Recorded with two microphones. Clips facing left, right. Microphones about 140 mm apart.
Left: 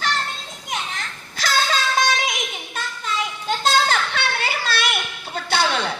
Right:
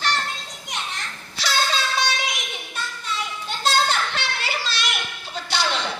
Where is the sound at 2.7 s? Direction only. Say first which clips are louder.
Left 2 dB; 90° left; by 4.9 s 60° left (ahead or behind).